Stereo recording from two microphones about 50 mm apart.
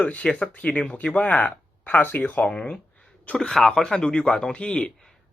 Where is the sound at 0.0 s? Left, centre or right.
Left.